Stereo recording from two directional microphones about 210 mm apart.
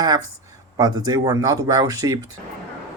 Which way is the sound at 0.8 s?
20° right (ahead or behind).